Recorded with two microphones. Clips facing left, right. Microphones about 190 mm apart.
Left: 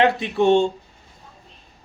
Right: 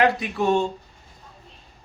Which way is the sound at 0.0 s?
25° left (ahead or behind).